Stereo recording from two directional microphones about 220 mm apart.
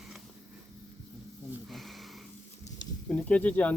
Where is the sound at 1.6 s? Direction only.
Centre (ahead or behind).